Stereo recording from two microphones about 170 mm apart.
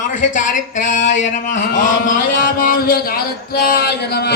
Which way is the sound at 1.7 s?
50° left (ahead or behind).